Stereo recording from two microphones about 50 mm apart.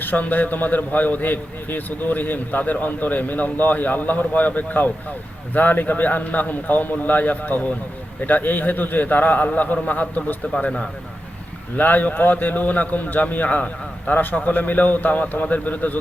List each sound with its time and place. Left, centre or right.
0.0 s a man's voice: left
11.8 s a man's voice: left